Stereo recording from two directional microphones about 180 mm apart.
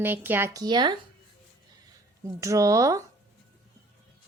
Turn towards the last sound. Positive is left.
turn(degrees=-20)  # may be behind; listen again after turning